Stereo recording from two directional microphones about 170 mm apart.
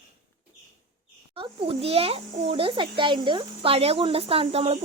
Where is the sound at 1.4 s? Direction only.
35° right (ahead or behind).